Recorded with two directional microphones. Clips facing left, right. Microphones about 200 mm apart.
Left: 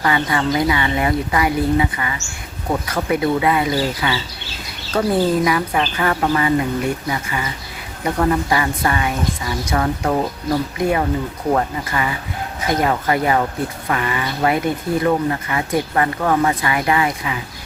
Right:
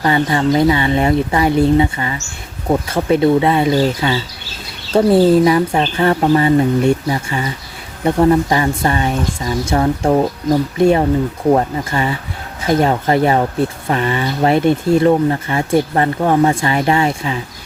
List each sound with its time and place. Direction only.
0.0 s speech: 30° right (ahead or behind)